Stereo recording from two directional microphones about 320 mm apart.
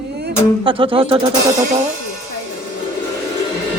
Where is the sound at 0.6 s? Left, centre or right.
Centre.